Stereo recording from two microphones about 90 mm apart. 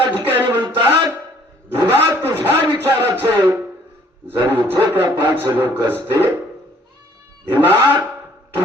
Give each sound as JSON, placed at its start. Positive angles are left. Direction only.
{"t": 0.3, "sound": "a sound", "side_deg": -20}
{"t": 4.3, "sound": "a man's voice", "side_deg": -25}
{"t": 7.4, "sound": "cat", "side_deg": -20}